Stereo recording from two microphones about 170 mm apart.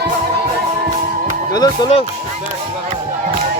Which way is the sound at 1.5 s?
25° left (ahead or behind).